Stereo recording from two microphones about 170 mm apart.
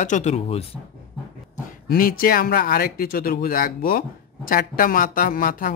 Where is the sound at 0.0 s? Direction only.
45° left (ahead or behind).